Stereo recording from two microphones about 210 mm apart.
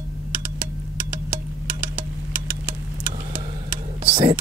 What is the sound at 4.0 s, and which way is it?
Vehicle, 25° right (ahead or behind).